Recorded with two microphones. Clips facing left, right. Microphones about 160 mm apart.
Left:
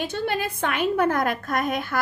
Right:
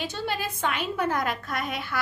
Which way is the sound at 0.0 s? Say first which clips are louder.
Left 4 dB; 55° left (ahead or behind).